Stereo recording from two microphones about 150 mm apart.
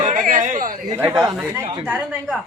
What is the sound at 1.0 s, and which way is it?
Speech, 25° right (ahead or behind).